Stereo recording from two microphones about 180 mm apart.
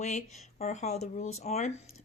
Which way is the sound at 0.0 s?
40° left (ahead or behind).